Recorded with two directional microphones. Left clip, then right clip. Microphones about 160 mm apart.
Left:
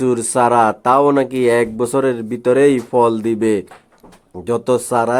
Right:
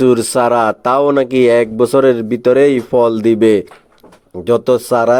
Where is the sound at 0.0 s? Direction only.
25° right (ahead or behind).